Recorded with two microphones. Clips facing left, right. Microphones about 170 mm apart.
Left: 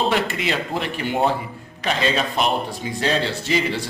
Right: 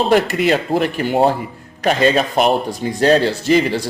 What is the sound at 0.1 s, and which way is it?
Speech, 45° right (ahead or behind).